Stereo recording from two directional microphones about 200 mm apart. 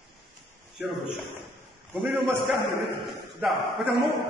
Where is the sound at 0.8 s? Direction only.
Centre (ahead or behind).